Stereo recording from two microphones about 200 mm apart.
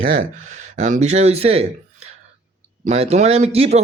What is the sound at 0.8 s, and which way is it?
Speech, 35° right (ahead or behind).